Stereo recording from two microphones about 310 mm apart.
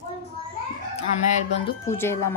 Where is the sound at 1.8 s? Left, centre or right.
Centre.